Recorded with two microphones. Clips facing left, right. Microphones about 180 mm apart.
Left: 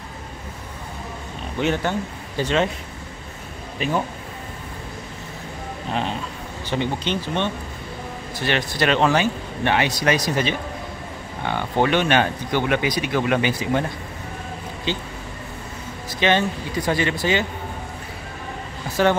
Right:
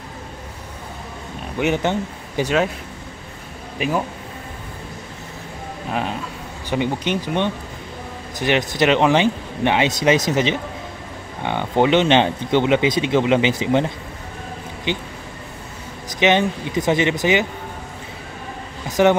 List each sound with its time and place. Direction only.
1.6 s speech: 15° right (ahead or behind)
3.7 s speech: 10° right (ahead or behind)
6.7 s speech: 10° right (ahead or behind)
16.2 s speech: 20° right (ahead or behind)
18.9 s speech: 15° right (ahead or behind)